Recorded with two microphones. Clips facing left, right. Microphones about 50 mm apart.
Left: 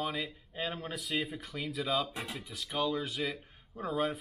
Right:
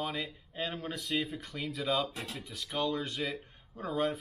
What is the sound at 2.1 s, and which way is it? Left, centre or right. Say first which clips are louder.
Speech: left 1 dB; centre.